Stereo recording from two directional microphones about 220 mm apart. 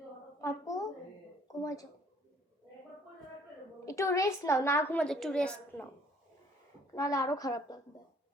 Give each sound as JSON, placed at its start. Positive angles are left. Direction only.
{"t": 0.4, "sound": "a sound", "side_deg": 15}
{"t": 3.8, "sound": "a woman's voice", "side_deg": 15}
{"t": 6.9, "sound": "a woman's voice", "side_deg": 15}